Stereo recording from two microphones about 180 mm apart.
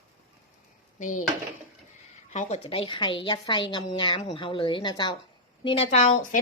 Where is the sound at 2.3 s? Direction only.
40° left (ahead or behind).